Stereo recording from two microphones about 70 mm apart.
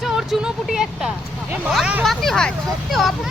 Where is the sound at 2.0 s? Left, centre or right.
Centre.